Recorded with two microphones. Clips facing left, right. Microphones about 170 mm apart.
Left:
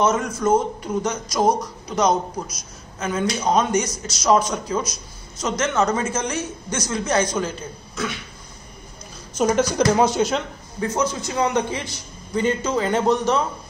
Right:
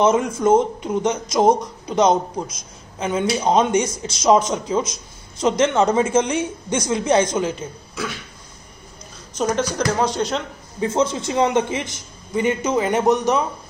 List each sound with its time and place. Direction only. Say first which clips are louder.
0.0 s a man's voice: right 3 dB; 25° right (ahead or behind)
9.4 s speech: left 2 dB; 5° left (ahead or behind)
10.8 s a man's voice: right 3 dB; 25° right (ahead or behind)